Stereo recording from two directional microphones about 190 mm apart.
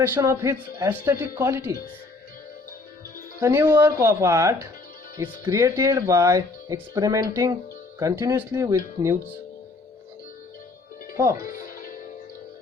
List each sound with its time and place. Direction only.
0.0 s speech: 15° right (ahead or behind)
3.4 s speech: 10° right (ahead or behind)
11.4 s music: 45° left (ahead or behind)